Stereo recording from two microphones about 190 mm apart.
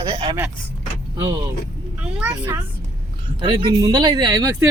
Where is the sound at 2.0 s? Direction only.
5° right (ahead or behind).